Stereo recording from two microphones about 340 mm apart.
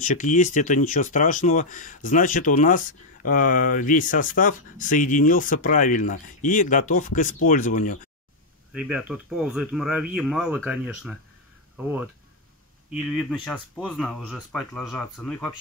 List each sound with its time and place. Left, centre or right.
0.0 s speech: left
8.7 s speech: centre